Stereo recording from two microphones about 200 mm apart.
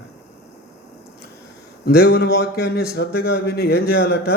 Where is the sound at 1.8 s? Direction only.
50° left (ahead or behind).